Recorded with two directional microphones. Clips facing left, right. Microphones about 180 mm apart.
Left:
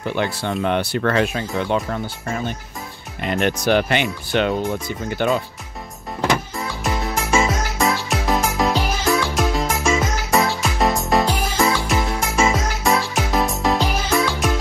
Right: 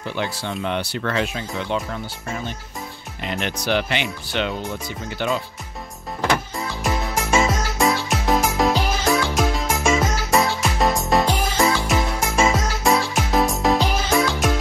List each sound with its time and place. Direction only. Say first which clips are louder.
0.1 s speech: left 3 dB; 55° left (ahead or behind)
3.2 s speech: left 6 dB; 50° left (ahead or behind)
7.3 s music: even; centre (ahead or behind)